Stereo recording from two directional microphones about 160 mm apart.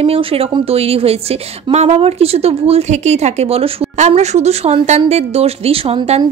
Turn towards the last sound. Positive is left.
turn(degrees=-40)  # may be behind; listen again after turning